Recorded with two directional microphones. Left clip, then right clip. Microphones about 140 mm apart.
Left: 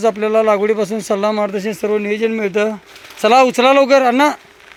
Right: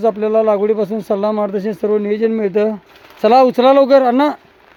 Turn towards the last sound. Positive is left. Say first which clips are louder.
# even
turn(degrees=-20)  # may be behind; listen again after turning